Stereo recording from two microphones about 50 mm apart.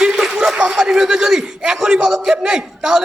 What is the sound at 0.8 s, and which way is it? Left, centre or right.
A man's voice, centre.